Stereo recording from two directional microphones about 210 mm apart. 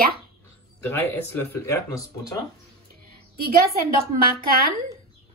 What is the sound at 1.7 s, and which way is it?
Speech, 15° left (ahead or behind).